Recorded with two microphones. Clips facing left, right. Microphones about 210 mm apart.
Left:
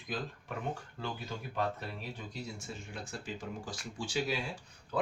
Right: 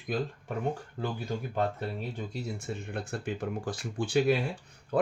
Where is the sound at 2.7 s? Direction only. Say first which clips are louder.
Right 8 dB; 60° right (ahead or behind).